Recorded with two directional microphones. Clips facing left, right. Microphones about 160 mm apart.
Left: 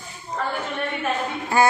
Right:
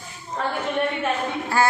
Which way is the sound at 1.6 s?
15° left (ahead or behind).